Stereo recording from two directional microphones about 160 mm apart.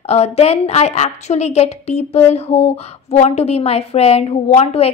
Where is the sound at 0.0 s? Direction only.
40° left (ahead or behind).